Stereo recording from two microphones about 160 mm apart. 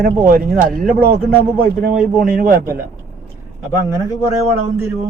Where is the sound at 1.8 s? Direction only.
60° right (ahead or behind).